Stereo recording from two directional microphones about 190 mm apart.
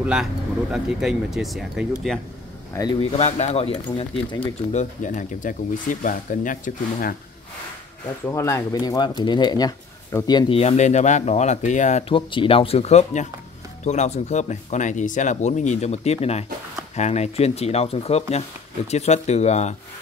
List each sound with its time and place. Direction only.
0.0 s speech: 5° right (ahead or behind)
2.7 s a man's voice: 20° left (ahead or behind)
3.0 s speech: 35° left (ahead or behind)
4.7 s speech: 40° left (ahead or behind)
8.3 s speech: 15° left (ahead or behind); by 19.7 s 35° left (ahead or behind)